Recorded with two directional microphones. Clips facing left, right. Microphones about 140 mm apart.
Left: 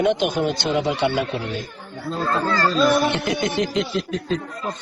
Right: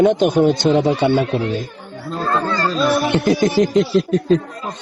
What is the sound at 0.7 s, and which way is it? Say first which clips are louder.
Music: right 6 dB; 40° right (ahead or behind).